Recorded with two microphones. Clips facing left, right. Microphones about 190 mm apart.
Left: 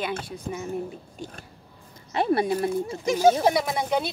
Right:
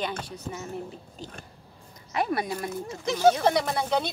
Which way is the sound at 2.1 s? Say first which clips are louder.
Left 5 dB; 30° left (ahead or behind).